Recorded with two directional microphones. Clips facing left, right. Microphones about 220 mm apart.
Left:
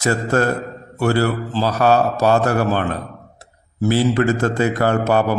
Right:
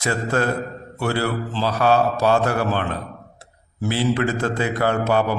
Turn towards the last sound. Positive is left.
turn(degrees=45)  # may be behind; listen again after turning